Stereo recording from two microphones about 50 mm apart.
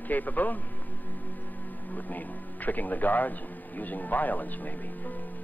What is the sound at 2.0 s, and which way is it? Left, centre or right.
A man's voice, left.